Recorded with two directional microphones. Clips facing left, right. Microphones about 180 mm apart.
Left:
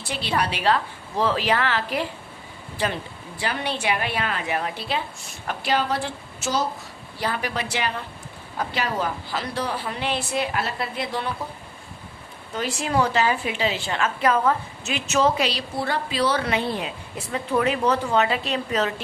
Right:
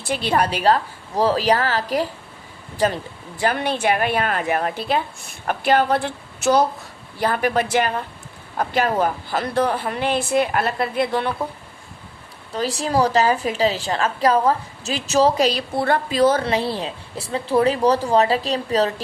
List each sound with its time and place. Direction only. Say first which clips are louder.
0.1 s a woman's voice: right 5 dB; 50° right (ahead or behind)
12.5 s a woman's voice: right 3 dB; 35° right (ahead or behind)
16.4 s a woman's voice: right 3 dB; 35° right (ahead or behind)